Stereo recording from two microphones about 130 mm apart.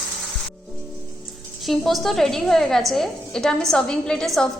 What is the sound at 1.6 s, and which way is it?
A woman's voice, centre (ahead or behind).